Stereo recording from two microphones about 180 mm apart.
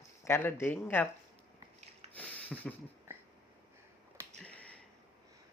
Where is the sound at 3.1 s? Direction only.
15° right (ahead or behind).